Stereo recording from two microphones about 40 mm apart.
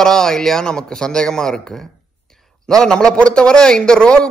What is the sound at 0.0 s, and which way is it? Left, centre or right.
Speech, centre.